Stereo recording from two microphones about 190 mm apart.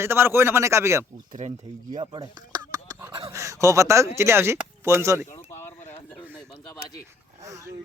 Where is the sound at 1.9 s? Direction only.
20° right (ahead or behind).